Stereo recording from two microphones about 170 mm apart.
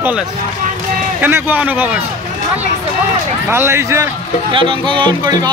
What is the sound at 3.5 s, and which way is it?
Speech, 15° right (ahead or behind).